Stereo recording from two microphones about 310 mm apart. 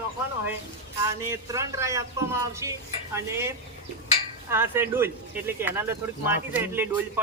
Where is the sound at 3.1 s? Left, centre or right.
Centre.